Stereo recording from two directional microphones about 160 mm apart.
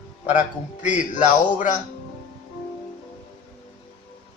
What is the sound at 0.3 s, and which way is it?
A man's voice, 50° left (ahead or behind).